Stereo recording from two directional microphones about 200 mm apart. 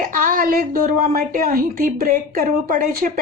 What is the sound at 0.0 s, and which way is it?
A woman's voice, 40° right (ahead or behind).